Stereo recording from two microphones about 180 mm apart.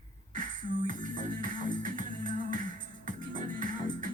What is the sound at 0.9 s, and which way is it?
Music, 45° right (ahead or behind).